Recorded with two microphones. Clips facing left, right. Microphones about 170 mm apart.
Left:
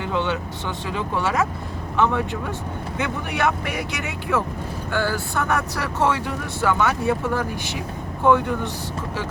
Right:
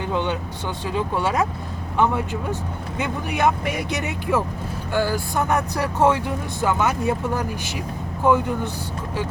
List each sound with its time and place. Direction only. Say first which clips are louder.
0.1 s speech: left 1 dB; 15° right (ahead or behind)